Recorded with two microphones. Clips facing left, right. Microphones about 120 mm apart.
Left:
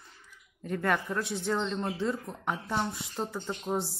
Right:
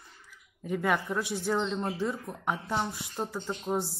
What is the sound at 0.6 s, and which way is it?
Speech, 10° right (ahead or behind).